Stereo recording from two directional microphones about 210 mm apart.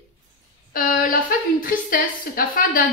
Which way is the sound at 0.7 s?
40° left (ahead or behind).